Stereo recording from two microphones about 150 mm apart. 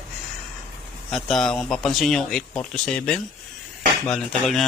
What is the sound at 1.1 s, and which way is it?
Speech, centre (ahead or behind).